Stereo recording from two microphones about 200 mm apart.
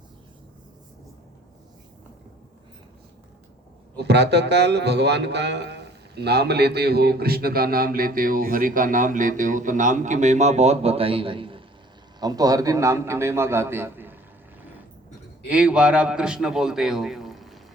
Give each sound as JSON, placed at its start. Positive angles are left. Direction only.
{"t": 3.9, "sound": "a man's voice", "side_deg": -60}
{"t": 15.4, "sound": "a man's voice", "side_deg": -5}